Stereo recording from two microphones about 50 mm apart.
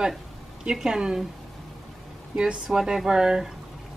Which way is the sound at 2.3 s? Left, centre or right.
Centre.